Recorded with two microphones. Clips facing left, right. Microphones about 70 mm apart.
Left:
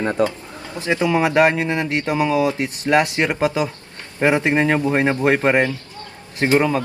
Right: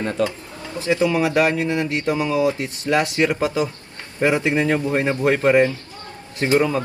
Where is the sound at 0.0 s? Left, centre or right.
Left.